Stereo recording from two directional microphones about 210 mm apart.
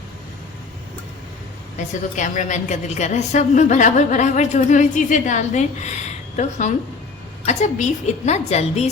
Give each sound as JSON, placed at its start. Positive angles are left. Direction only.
{"t": 2.1, "sound": "a woman's voice", "side_deg": 35}